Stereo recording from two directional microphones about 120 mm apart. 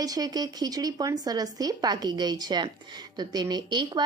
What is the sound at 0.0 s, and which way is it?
Speech, 30° right (ahead or behind).